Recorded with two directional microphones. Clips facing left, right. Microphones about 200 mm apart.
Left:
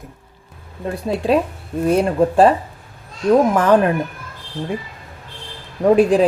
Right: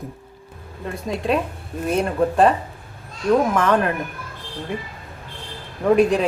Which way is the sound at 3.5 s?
30° left (ahead or behind).